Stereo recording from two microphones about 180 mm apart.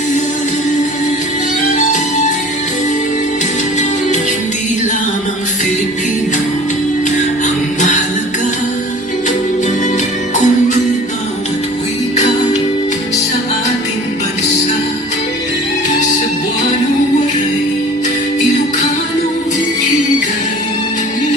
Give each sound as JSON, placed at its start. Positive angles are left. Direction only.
{"t": 1.6, "sound": "music", "side_deg": 40}
{"t": 7.4, "sound": "music", "side_deg": 40}
{"t": 10.3, "sound": "music", "side_deg": 40}